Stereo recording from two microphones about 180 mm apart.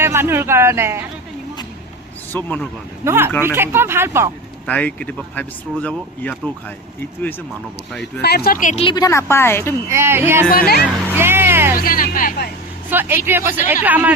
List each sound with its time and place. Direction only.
0.0 s speech: 15° right (ahead or behind)
2.3 s speech: 10° left (ahead or behind)
3.0 s speech: 15° right (ahead or behind)
4.6 s speech: 5° left (ahead or behind)
8.2 s speech: 60° left (ahead or behind)
8.8 s a woman's voice: 25° left (ahead or behind)
9.0 s speech: 15° left (ahead or behind)
9.9 s speech: 15° right (ahead or behind)
11.0 s music: 10° right (ahead or behind)
11.8 s speech: 50° left (ahead or behind)
12.9 s speech: 10° right (ahead or behind)